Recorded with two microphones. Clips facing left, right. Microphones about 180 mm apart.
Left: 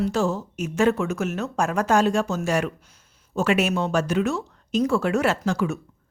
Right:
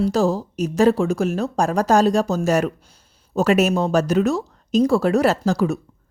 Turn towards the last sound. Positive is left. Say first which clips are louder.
# right 4 dB
turn(degrees=-35)  # may be behind; listen again after turning